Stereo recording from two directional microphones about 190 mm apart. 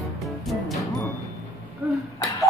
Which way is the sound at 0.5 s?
Centre (ahead or behind).